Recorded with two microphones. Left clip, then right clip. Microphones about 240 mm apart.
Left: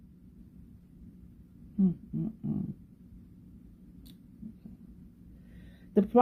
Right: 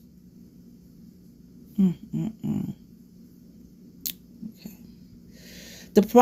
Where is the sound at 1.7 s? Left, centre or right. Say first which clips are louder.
Right 5 dB; right.